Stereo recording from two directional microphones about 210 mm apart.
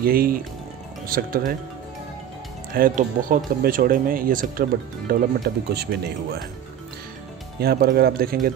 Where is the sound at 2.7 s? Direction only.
40° right (ahead or behind).